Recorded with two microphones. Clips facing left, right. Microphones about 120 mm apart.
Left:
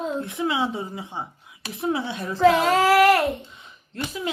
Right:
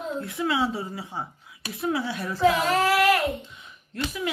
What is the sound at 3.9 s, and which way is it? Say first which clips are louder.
Speech: right 1 dB; 30° left (ahead or behind).